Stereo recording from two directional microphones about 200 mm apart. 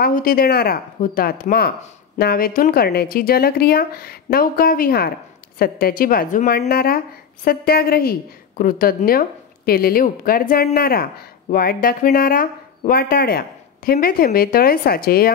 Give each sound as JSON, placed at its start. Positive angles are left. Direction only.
{"t": 0.0, "sound": "a woman's voice", "side_deg": 45}